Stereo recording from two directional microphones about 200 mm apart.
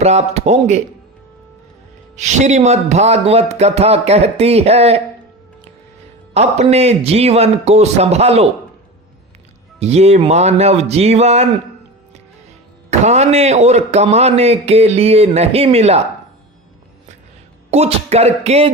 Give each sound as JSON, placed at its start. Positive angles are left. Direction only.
{"t": 0.0, "sound": "speech", "side_deg": -35}
{"t": 2.1, "sound": "speech", "side_deg": -35}
{"t": 6.3, "sound": "speech", "side_deg": -35}
{"t": 9.8, "sound": "speech", "side_deg": -30}
{"t": 12.9, "sound": "speech", "side_deg": -35}
{"t": 17.7, "sound": "speech", "side_deg": -30}